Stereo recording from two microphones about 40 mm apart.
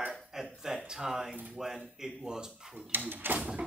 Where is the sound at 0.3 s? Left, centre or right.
Centre.